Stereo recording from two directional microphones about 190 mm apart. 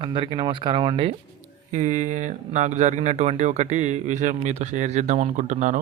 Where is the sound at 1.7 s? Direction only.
40° right (ahead or behind).